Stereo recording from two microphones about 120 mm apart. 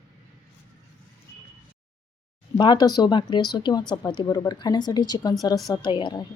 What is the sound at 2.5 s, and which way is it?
Speech, 35° left (ahead or behind).